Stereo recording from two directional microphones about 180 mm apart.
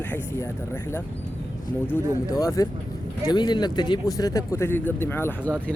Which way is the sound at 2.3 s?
20° left (ahead or behind).